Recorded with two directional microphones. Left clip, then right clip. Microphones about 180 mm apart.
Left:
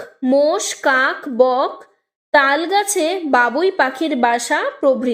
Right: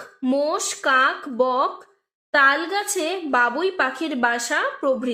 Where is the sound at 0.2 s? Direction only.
30° left (ahead or behind).